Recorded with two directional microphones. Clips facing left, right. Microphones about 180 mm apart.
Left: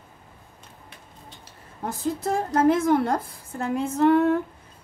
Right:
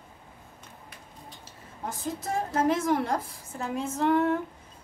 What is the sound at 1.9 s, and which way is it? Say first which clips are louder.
A woman's voice: left 6 dB; 60° left (ahead or behind).